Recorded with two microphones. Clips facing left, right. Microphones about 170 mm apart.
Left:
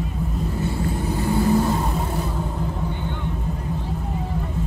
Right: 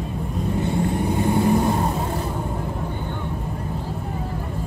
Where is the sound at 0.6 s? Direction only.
20° right (ahead or behind).